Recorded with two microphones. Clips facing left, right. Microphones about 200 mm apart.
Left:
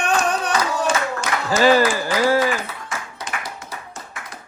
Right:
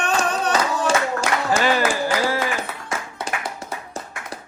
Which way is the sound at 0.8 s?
30° right (ahead or behind).